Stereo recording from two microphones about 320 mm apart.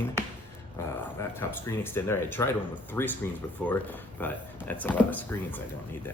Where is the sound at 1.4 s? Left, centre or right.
Centre.